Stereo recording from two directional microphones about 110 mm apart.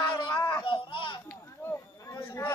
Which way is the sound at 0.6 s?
50° left (ahead or behind).